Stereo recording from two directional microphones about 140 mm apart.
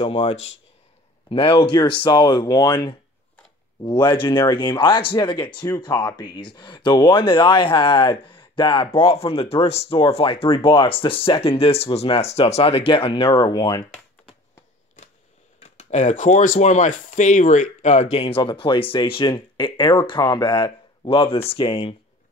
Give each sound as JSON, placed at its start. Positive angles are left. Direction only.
{"t": 0.0, "sound": "speech", "side_deg": 45}
{"t": 4.0, "sound": "speech", "side_deg": 35}
{"t": 15.6, "sound": "speech", "side_deg": 55}